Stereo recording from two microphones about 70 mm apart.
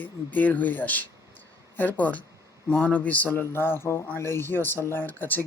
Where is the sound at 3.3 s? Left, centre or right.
Left.